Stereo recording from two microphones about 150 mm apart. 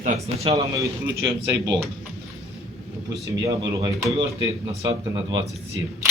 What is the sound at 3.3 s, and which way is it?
Speech, 30° right (ahead or behind).